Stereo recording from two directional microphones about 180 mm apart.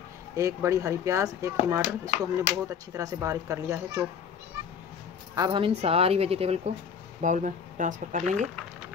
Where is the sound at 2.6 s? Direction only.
20° right (ahead or behind).